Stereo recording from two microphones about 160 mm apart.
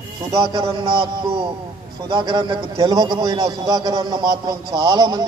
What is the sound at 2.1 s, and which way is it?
A man's voice, 30° right (ahead or behind).